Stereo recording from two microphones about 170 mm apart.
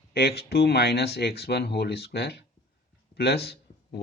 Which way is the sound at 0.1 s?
70° left (ahead or behind).